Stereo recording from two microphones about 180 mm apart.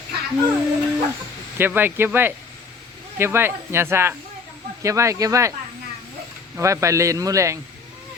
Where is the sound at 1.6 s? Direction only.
10° right (ahead or behind).